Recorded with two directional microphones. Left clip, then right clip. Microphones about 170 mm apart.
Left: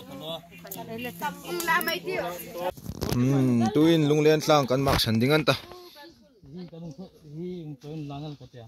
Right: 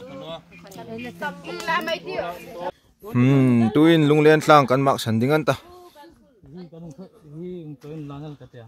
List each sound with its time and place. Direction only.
1.2 s speech: 70° left (ahead or behind); by 2.6 s 55° left (ahead or behind)
3.2 s speech: 35° right (ahead or behind); by 5.6 s 15° right (ahead or behind)
8.1 s speech: 15° left (ahead or behind)